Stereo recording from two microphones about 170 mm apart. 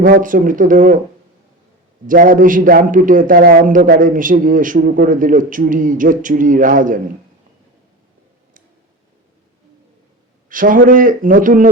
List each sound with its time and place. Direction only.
0.0 s a man's voice: 55° right (ahead or behind)
2.0 s a man's voice: 55° right (ahead or behind)
10.5 s a man's voice: 55° right (ahead or behind)